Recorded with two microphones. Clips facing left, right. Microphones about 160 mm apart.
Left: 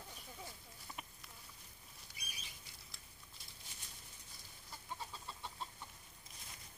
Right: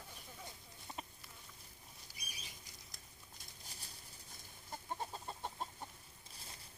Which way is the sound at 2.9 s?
40° right (ahead or behind).